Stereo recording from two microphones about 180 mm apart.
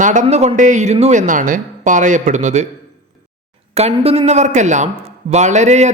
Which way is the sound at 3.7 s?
35° right (ahead or behind).